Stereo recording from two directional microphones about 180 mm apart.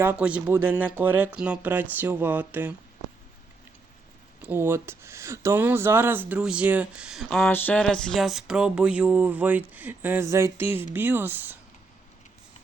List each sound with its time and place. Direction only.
0.0 s speech: 10° right (ahead or behind)
4.4 s speech: 10° right (ahead or behind)